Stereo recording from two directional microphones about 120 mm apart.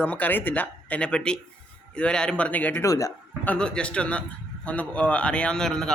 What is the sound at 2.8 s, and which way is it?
Speech, 30° left (ahead or behind).